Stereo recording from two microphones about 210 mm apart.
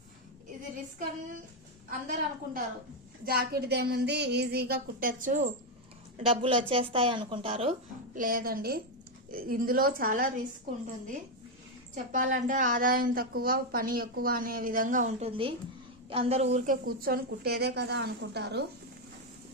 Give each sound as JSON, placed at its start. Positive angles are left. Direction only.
{"t": 1.9, "sound": "a woman's voice", "side_deg": -40}
{"t": 6.1, "sound": "speech", "side_deg": -30}
{"t": 12.1, "sound": "a woman's voice", "side_deg": -40}